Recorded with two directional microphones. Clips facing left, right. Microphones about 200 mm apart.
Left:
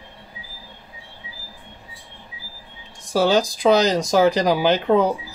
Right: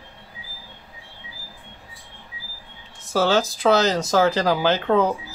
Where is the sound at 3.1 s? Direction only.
15° left (ahead or behind).